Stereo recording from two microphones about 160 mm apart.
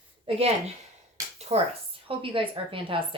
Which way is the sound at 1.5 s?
40° right (ahead or behind).